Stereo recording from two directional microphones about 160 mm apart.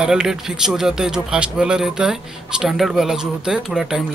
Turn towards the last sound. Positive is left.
turn(degrees=-5)  # may be behind; listen again after turning